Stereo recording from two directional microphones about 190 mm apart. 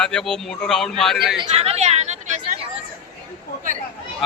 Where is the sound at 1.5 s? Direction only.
35° right (ahead or behind).